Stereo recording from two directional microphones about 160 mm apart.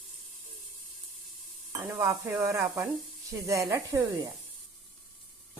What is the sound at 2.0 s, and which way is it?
Speech, 15° right (ahead or behind).